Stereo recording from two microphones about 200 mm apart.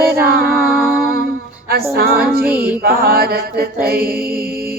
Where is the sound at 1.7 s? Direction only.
50° right (ahead or behind).